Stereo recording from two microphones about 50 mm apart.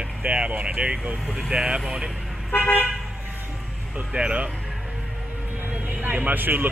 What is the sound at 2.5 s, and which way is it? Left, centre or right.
Car, left.